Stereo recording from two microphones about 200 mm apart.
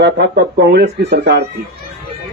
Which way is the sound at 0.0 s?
55° right (ahead or behind).